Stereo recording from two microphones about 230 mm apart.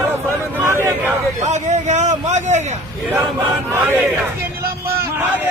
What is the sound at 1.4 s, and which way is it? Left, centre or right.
A man's voice, right.